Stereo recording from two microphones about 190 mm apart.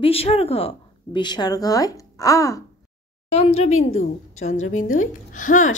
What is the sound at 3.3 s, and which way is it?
Speech, 35° left (ahead or behind).